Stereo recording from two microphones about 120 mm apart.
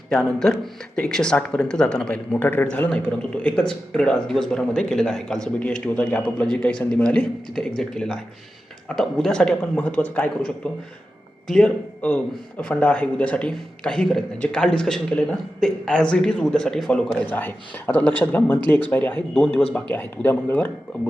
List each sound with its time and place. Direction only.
0.1 s a man's voice: 5° left (ahead or behind)